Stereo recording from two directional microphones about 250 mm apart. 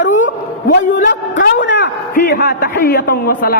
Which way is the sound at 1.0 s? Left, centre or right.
Left.